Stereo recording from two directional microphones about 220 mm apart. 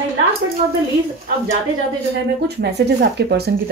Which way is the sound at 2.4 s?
50° right (ahead or behind).